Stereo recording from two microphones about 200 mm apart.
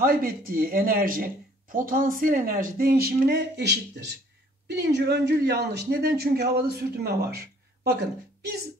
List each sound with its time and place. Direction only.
0.0 s speech: 45° right (ahead or behind)